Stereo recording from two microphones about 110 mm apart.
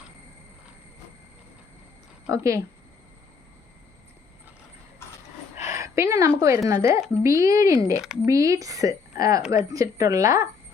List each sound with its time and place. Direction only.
2.3 s speech: 30° right (ahead or behind)
5.6 s a sound: 25° right (ahead or behind)
6.4 s speech: 30° right (ahead or behind)
8.0 s speech: 5° right (ahead or behind)
8.3 s a woman's voice: 30° right (ahead or behind)